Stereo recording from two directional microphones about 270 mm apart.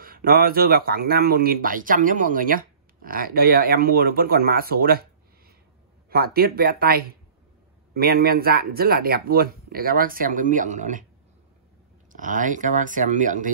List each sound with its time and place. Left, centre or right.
0.0 s speech: right
6.0 s speech: right
12.1 s speech: right